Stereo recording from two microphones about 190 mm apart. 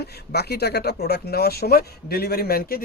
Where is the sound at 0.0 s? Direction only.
60° left (ahead or behind).